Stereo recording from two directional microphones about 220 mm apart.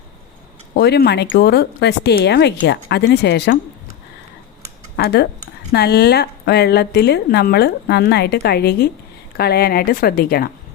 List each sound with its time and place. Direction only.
0.7 s a woman's voice: 50° left (ahead or behind)
4.9 s a woman's voice: 45° left (ahead or behind)